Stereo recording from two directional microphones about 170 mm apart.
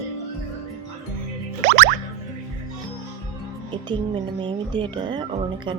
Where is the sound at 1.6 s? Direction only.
45° right (ahead or behind).